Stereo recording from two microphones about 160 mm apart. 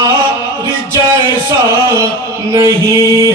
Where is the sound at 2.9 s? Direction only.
20° right (ahead or behind).